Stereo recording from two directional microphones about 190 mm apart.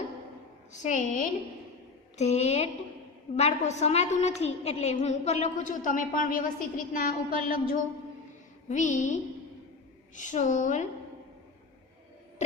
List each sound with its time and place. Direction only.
0.7 s a woman's voice: 40° left (ahead or behind)
10.2 s a woman's voice: 40° left (ahead or behind)